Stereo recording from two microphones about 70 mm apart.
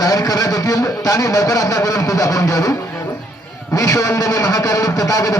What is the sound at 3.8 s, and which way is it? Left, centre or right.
Speech, left.